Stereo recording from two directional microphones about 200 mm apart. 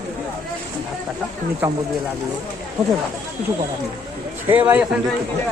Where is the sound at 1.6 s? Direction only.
10° right (ahead or behind).